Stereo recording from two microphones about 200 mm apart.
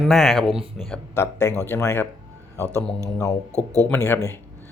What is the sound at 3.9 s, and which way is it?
Speech, 10° left (ahead or behind).